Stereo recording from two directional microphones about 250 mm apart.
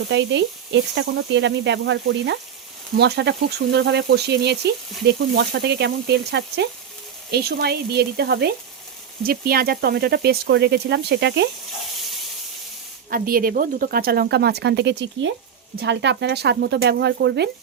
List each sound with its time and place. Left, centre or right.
0.1 s speech: right
13.1 s speech: right